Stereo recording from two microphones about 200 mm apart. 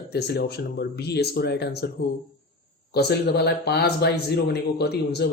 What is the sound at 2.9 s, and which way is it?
Speech, 55° left (ahead or behind).